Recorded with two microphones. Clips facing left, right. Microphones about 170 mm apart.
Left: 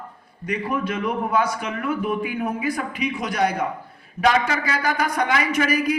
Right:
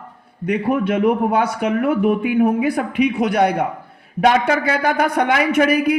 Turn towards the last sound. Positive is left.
turn(degrees=-60)  # may be behind; listen again after turning